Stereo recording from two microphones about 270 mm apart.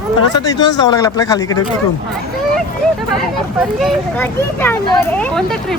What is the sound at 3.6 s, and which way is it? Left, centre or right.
Speech, centre.